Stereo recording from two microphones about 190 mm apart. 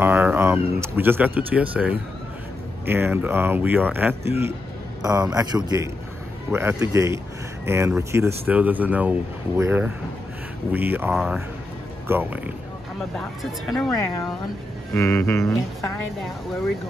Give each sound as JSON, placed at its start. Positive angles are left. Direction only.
{"t": 0.0, "sound": "a man's voice", "side_deg": -10}
{"t": 15.0, "sound": "speech", "side_deg": 10}